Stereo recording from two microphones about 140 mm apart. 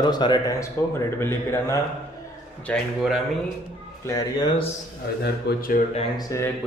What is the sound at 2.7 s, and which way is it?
Speech, 10° left (ahead or behind).